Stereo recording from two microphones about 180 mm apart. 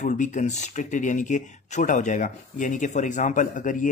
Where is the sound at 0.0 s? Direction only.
45° left (ahead or behind).